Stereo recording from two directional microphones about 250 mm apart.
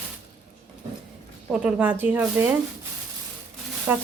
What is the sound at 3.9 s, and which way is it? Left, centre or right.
Speech, centre.